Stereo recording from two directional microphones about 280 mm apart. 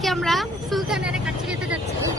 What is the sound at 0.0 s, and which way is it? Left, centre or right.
Speech, centre.